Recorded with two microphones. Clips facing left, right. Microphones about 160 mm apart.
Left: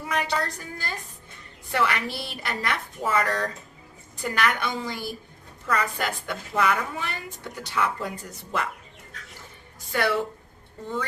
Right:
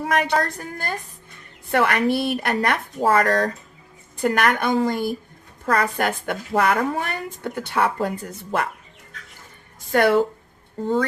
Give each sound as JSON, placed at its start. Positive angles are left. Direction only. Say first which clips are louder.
{"t": 0.0, "sound": "a woman's voice", "louder": "right 6 dB", "side_deg": -55}
{"t": 9.9, "sound": "speech", "louder": "right 8 dB", "side_deg": -50}